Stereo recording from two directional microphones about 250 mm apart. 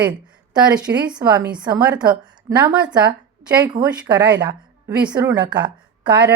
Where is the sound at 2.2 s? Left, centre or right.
Centre.